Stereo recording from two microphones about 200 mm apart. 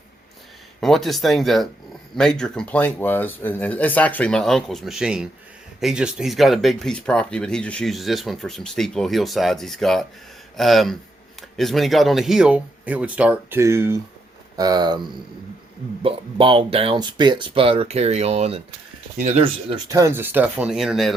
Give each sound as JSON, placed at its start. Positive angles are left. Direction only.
{"t": 0.8, "sound": "speech", "side_deg": 0}
{"t": 19.7, "sound": "speech", "side_deg": -15}